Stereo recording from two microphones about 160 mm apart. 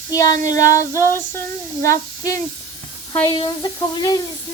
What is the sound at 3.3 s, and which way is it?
Speech, 25° left (ahead or behind).